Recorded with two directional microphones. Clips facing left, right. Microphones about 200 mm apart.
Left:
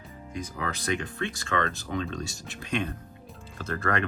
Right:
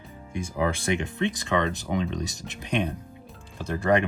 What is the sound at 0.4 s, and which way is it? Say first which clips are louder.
Speech: right 7 dB; 25° right (ahead or behind).